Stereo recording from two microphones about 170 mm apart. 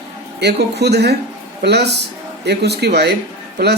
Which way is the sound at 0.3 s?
75° right (ahead or behind).